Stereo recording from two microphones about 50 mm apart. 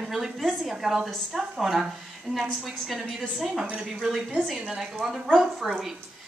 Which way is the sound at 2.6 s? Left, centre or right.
Centre.